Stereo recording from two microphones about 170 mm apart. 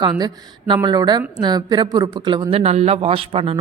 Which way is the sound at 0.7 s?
25° right (ahead or behind).